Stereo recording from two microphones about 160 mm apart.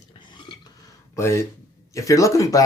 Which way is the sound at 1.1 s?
15° left (ahead or behind).